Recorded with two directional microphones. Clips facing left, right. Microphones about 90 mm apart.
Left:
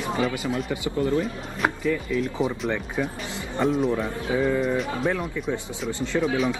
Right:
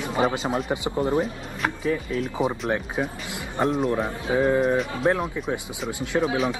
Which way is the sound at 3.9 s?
25° right (ahead or behind).